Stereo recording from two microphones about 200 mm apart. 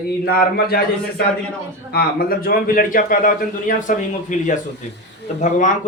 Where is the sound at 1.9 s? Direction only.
50° left (ahead or behind).